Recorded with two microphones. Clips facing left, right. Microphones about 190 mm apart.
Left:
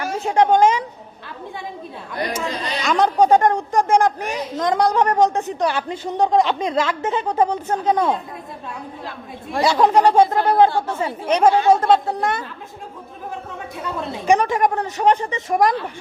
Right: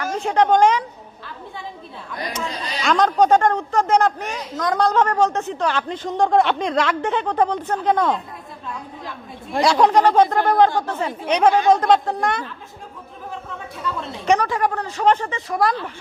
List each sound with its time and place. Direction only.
0.0 s speech: 5° left (ahead or behind)
2.8 s speech: 10° left (ahead or behind)
4.5 s a woman's voice: 25° left (ahead or behind)
4.8 s speech: 15° left (ahead or behind)
9.6 s speech: centre (ahead or behind)
14.3 s a woman's voice: 20° left (ahead or behind)